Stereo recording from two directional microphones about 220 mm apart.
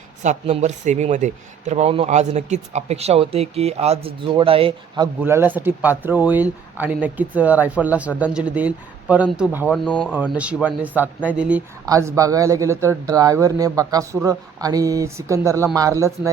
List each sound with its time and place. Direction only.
0.2 s speech: 30° right (ahead or behind)
5.2 s speech: 10° right (ahead or behind)
9.8 s speech: 5° left (ahead or behind)
10.3 s speech: 5° right (ahead or behind)